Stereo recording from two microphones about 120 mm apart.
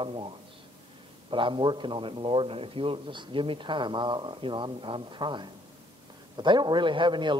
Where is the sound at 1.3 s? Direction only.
40° right (ahead or behind).